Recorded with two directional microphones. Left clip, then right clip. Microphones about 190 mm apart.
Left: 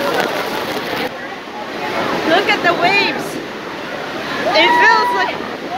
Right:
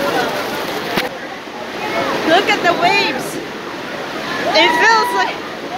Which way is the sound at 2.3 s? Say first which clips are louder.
Right 1 dB; 15° right (ahead or behind).